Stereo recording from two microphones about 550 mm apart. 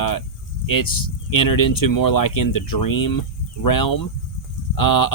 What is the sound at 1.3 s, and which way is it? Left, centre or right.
Speech, left.